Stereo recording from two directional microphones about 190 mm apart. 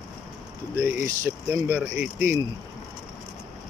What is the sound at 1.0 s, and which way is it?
Speech, 15° right (ahead or behind).